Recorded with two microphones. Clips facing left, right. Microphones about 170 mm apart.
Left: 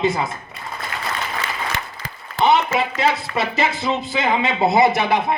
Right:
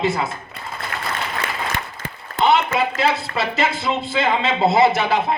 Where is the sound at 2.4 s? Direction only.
20° left (ahead or behind).